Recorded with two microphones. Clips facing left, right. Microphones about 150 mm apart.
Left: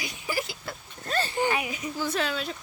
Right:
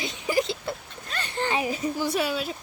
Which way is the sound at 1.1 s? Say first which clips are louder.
Left 7 dB; 30° left (ahead or behind).